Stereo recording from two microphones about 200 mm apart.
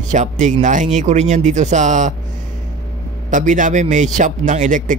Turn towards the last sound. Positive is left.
turn(degrees=-40)  # may be behind; listen again after turning